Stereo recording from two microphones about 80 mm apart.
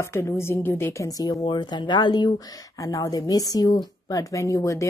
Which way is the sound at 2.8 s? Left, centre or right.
Left.